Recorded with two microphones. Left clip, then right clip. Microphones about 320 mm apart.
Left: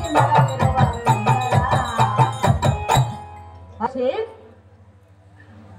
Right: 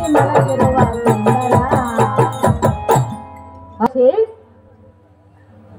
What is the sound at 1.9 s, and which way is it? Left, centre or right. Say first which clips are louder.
Music: right 3 dB; right.